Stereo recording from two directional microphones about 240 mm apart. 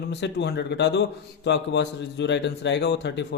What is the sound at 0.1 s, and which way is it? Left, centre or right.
Speech, left.